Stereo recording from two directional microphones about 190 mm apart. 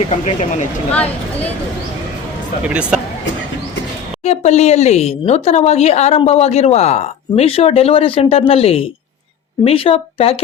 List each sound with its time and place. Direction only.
0.0 s speech: 35° left (ahead or behind)
0.9 s speech: 10° left (ahead or behind)
2.6 s speech: 5° right (ahead or behind)
4.2 s speech: 35° left (ahead or behind)